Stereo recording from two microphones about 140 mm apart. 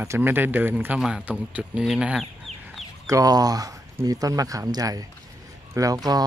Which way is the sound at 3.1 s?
25° right (ahead or behind).